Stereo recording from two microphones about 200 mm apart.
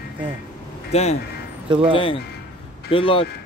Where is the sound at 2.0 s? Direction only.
25° left (ahead or behind).